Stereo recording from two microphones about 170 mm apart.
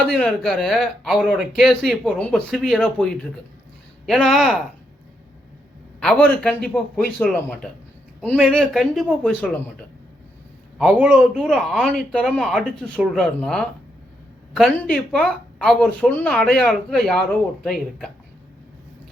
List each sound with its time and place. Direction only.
0.1 s speech: 5° left (ahead or behind)
6.0 s speech: 5° left (ahead or behind)
10.8 s speech: 5° right (ahead or behind)